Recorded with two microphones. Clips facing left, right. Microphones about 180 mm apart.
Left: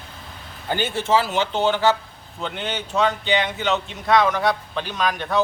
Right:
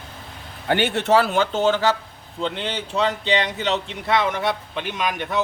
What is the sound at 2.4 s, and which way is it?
Speech, 30° right (ahead or behind).